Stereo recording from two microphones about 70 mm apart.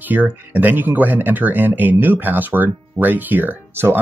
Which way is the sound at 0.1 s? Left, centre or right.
Right.